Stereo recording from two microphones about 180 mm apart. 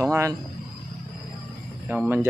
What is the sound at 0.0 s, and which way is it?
Speech, 15° right (ahead or behind).